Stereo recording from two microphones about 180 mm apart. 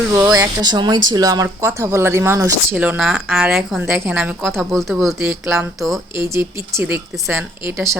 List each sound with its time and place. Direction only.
0.1 s speech: 20° right (ahead or behind); by 6.0 s centre (ahead or behind)
6.1 s speech: 15° right (ahead or behind)